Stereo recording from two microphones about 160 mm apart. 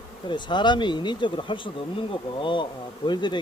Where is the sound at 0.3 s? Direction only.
30° left (ahead or behind).